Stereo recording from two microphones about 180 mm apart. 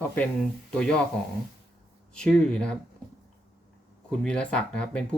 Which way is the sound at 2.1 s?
5° left (ahead or behind).